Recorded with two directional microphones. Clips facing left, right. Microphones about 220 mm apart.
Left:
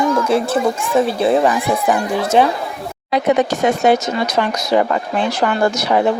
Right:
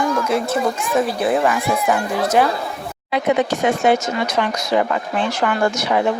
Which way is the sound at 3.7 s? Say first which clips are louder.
Left 2 dB; 40° left (ahead or behind).